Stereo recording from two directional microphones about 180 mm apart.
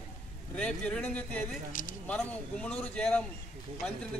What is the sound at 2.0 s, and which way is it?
A man's voice, 5° left (ahead or behind).